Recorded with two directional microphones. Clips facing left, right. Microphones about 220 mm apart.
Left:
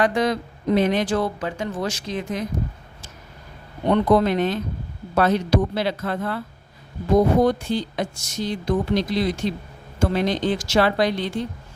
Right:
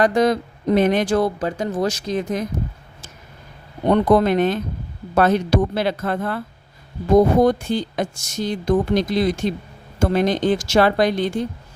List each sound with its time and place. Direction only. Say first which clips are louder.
0.0 s speech: right 4 dB; 40° right (ahead or behind)
3.8 s speech: right 2 dB; 45° right (ahead or behind)
7.4 s speech: right 3 dB; 45° right (ahead or behind)